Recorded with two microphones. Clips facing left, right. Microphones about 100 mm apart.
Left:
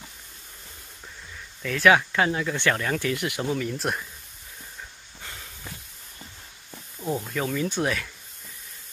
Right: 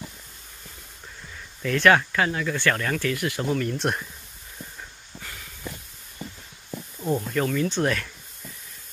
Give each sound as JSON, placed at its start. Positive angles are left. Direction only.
{"t": 1.6, "sound": "speech", "side_deg": 5}
{"t": 2.1, "sound": "speech", "side_deg": 20}
{"t": 3.5, "sound": "speech", "side_deg": 5}
{"t": 7.0, "sound": "speech", "side_deg": 5}